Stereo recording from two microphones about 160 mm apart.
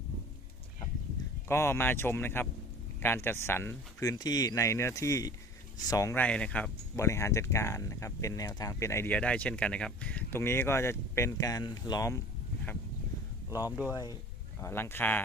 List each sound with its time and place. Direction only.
1.5 s speech: 15° left (ahead or behind)
6.1 s speech: 5° left (ahead or behind)
6.9 s speech: 20° left (ahead or behind)
13.9 s speech: 25° left (ahead or behind)